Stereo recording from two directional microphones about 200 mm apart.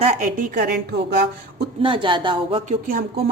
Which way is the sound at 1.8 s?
25° right (ahead or behind).